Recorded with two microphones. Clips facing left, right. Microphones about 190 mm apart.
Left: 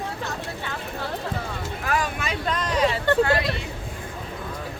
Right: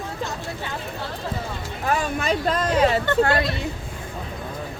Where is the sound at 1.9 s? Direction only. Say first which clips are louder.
Right 4 dB; 45° right (ahead or behind).